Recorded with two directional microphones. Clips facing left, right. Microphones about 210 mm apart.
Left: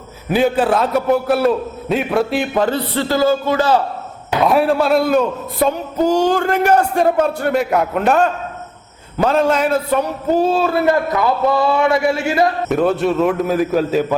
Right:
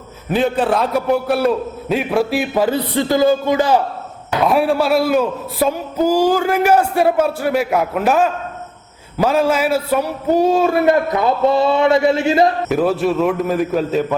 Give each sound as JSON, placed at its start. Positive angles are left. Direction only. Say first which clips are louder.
{"t": 0.3, "sound": "a man's voice", "louder": "left 1 dB", "side_deg": 5}
{"t": 4.4, "sound": "a man's voice", "louder": "left 1 dB", "side_deg": 0}
{"t": 12.6, "sound": "a man's voice", "louder": "even", "side_deg": -5}